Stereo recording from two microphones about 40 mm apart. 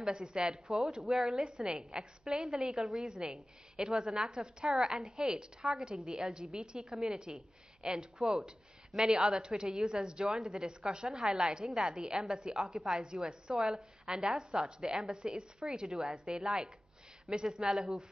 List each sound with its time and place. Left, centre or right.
0.0 s a woman's voice: right
0.7 s a woman's voice: centre
3.0 s a woman's voice: centre
17.6 s a woman's voice: centre